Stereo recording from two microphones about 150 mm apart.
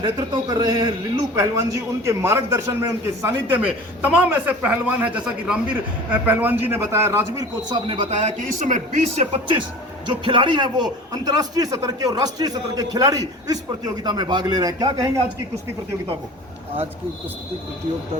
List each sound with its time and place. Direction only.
0.0 s a man's voice: 25° right (ahead or behind)
7.7 s speech: 40° right (ahead or behind); by 9.2 s 55° right (ahead or behind)
10.2 s a man's voice: 30° right (ahead or behind)